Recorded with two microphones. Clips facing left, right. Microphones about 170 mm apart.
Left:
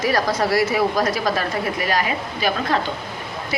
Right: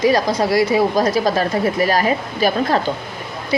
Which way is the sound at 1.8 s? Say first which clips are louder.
Right 5 dB; 40° right (ahead or behind).